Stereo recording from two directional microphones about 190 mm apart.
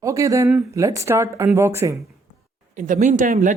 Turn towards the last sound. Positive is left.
turn(degrees=-40)  # may be behind; listen again after turning